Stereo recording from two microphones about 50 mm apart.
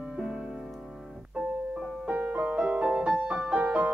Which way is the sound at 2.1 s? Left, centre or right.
Right.